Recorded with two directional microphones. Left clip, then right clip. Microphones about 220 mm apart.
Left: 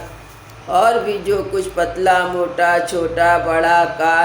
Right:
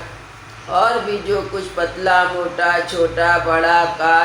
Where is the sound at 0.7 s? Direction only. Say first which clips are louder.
Left 2 dB; 45° left (ahead or behind).